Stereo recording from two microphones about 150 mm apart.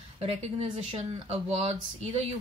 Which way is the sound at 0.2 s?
40° right (ahead or behind).